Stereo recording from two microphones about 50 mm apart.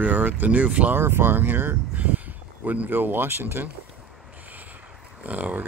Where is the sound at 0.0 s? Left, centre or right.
Right.